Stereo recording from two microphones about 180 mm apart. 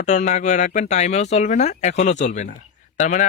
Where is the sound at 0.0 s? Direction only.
40° left (ahead or behind).